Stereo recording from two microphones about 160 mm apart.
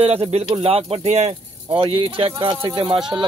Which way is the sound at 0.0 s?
40° right (ahead or behind).